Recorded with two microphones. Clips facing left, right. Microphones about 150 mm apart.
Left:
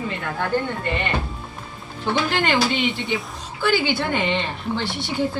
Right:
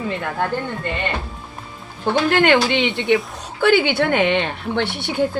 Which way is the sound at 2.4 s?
80° right.